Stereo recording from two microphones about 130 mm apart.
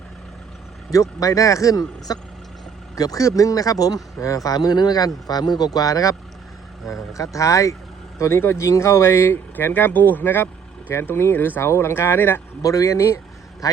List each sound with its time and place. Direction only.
1.2 s speech: 25° left (ahead or behind)